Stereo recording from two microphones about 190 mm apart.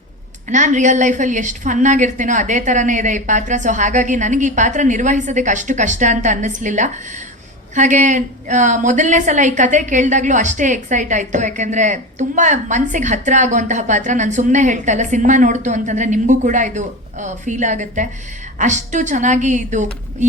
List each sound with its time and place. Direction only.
0.5 s a woman's voice: 40° right (ahead or behind)